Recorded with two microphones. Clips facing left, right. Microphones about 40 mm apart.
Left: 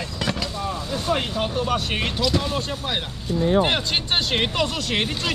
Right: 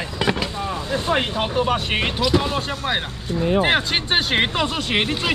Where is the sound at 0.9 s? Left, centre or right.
Right.